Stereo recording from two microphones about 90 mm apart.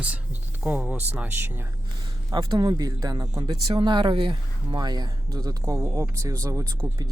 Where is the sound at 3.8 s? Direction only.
60° right (ahead or behind).